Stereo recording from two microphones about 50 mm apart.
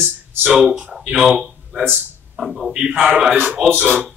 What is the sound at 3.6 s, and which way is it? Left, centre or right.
Speech, right.